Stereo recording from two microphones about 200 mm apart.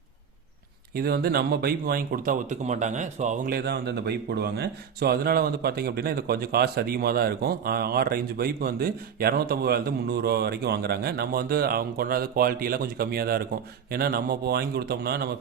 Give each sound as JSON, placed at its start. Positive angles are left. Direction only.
{"t": 0.9, "sound": "speech", "side_deg": -50}